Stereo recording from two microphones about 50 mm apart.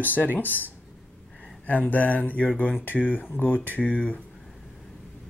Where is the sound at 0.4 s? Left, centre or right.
Left.